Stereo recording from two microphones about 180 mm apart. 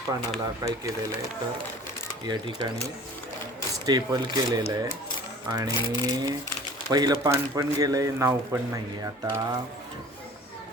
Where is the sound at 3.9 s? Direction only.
20° right (ahead or behind).